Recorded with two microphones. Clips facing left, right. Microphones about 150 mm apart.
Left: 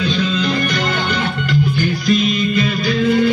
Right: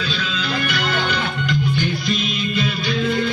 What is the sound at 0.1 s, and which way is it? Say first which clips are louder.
Music: left 7 dB; 15° left (ahead or behind).